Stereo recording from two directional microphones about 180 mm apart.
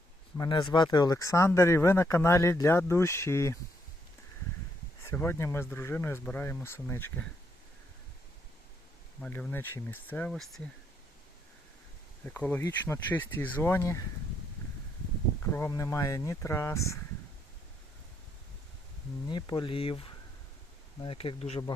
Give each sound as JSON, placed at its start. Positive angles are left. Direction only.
{"t": 0.3, "sound": "speech", "side_deg": 25}
{"t": 5.0, "sound": "speech", "side_deg": 10}
{"t": 9.2, "sound": "speech", "side_deg": 10}
{"t": 12.2, "sound": "speech", "side_deg": 10}
{"t": 15.4, "sound": "speech", "side_deg": 15}
{"t": 19.3, "sound": "speech", "side_deg": 25}